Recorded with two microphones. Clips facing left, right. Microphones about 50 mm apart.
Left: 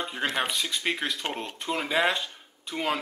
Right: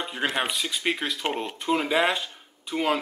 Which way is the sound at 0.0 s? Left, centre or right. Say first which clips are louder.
Right 2 dB; centre.